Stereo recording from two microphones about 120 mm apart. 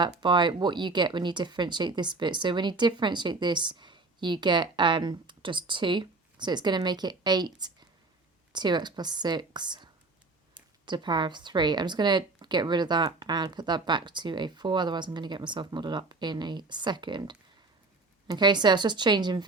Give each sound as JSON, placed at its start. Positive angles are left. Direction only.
{"t": 0.2, "sound": "speech", "side_deg": -40}